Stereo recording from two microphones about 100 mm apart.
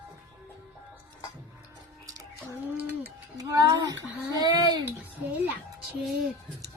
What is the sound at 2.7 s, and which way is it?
Music, 20° right (ahead or behind).